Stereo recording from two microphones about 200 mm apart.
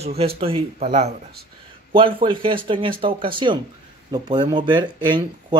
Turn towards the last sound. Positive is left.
turn(degrees=-20)  # may be behind; listen again after turning